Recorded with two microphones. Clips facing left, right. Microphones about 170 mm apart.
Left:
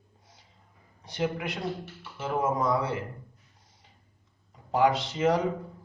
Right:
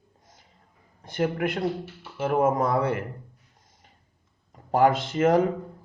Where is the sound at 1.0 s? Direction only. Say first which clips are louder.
Right 5 dB; 55° right (ahead or behind).